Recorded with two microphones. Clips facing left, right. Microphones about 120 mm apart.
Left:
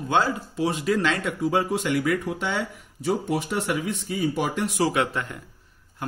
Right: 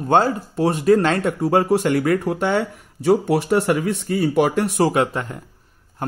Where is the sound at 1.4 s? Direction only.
60° right (ahead or behind).